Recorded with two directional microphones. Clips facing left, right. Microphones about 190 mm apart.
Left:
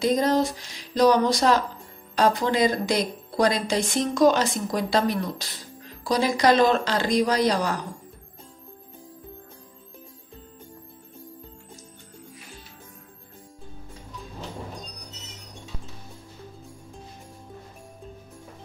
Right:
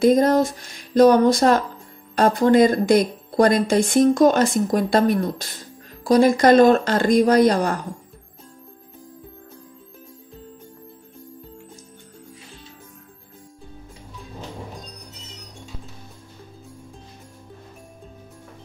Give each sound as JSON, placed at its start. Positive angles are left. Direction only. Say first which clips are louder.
{"t": 0.0, "sound": "a woman's voice", "louder": "right 6 dB", "side_deg": -50}